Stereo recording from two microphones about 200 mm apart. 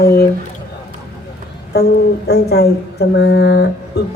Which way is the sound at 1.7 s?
55° left (ahead or behind).